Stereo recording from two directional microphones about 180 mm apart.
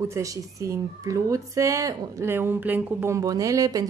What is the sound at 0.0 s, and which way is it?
Speech, 15° right (ahead or behind).